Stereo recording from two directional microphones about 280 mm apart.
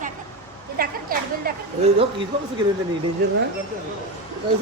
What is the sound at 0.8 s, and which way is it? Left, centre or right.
Speech, right.